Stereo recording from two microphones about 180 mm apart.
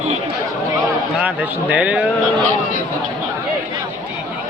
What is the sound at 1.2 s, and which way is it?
Speech, 10° right (ahead or behind).